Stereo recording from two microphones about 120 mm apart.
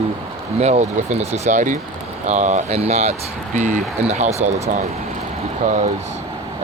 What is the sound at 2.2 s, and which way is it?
Speech, 80° right.